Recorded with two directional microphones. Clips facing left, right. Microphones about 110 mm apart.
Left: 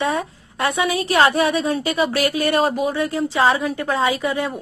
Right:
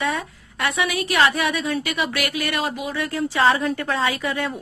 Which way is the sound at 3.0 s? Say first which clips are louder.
Right 1 dB; 20° left (ahead or behind).